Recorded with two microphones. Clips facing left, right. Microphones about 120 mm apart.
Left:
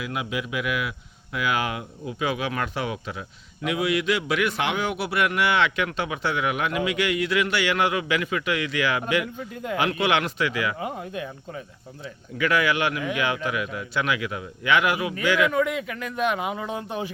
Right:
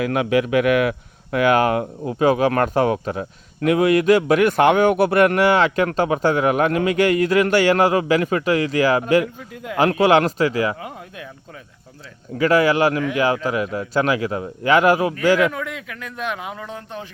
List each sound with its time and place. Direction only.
0.0 s a man's voice: 60° right (ahead or behind); by 10.8 s 35° right (ahead or behind)
10.8 s speech: centre (ahead or behind)
12.4 s a man's voice: 35° right (ahead or behind)
15.5 s speech: 5° left (ahead or behind)